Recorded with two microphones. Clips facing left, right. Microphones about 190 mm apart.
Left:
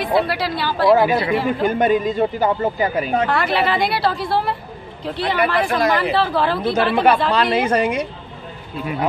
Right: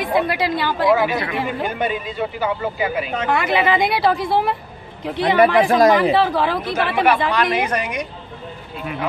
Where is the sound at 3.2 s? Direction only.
15° right (ahead or behind).